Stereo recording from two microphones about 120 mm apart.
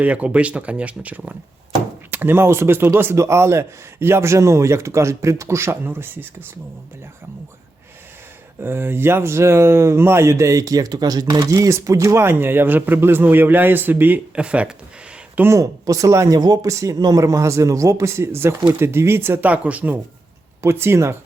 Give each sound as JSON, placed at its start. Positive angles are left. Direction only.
{"t": 0.0, "sound": "speech", "side_deg": -10}
{"t": 8.6, "sound": "speech", "side_deg": -20}
{"t": 15.4, "sound": "speech", "side_deg": -25}